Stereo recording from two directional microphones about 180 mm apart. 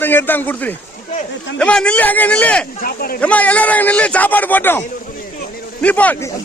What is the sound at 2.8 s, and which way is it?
Speech, 55° left (ahead or behind).